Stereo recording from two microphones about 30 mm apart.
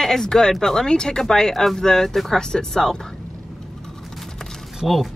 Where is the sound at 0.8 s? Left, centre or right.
Left.